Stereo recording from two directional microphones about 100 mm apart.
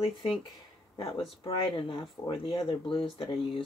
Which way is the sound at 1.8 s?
60° left (ahead or behind).